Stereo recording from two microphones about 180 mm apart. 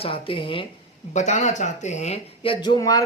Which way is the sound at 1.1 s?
40° left (ahead or behind).